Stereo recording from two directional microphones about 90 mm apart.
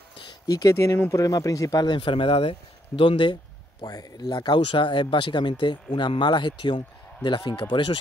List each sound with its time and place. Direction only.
0.2 s a sound: 45° left (ahead or behind)
0.7 s speech: 30° left (ahead or behind)
1.2 s speech: 40° left (ahead or behind)
2.0 s speech: 75° left (ahead or behind); by 2.5 s 90° left
3.0 s speech: 70° left (ahead or behind)
3.8 s speech: 45° left (ahead or behind); by 8.0 s 65° left (ahead or behind)